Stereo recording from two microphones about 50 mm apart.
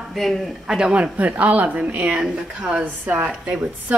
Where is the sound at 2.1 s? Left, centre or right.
Centre.